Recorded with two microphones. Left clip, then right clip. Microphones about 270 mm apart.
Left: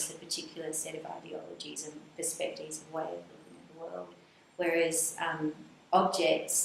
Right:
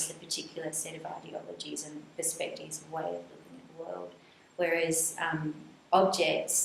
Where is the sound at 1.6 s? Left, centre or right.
Centre.